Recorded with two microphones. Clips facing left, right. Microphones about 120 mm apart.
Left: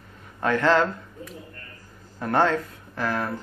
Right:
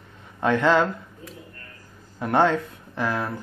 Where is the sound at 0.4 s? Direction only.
15° right (ahead or behind).